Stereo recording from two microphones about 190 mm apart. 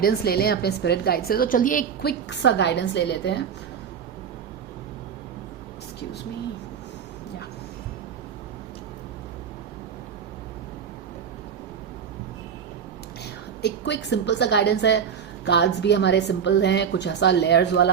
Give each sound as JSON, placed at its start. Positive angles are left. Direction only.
{"t": 0.0, "sound": "a woman's voice", "side_deg": 55}
{"t": 13.6, "sound": "a woman's voice", "side_deg": 60}